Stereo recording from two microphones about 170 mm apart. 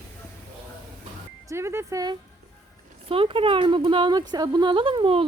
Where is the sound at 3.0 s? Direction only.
30° right (ahead or behind).